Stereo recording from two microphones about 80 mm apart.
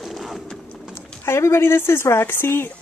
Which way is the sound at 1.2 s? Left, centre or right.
Left.